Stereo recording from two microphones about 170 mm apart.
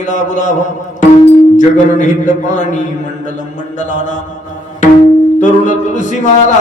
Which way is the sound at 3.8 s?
45° left (ahead or behind).